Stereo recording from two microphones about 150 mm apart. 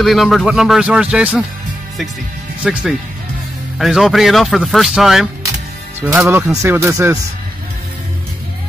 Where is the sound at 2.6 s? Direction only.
5° right (ahead or behind).